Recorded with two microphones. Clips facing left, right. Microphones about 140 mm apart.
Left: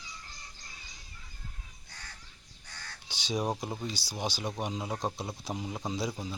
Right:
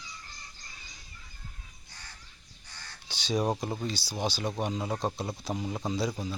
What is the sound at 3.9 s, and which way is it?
Speech, 15° left (ahead or behind).